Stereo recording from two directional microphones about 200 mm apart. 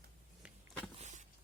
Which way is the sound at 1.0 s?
35° right (ahead or behind).